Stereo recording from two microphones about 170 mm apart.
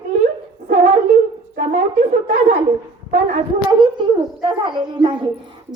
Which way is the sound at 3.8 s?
25° right (ahead or behind).